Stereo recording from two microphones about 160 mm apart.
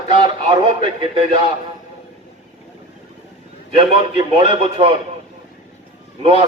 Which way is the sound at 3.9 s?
35° right (ahead or behind).